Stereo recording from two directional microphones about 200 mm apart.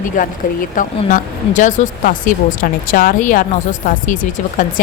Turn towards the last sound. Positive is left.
turn(degrees=40)  # may be behind; listen again after turning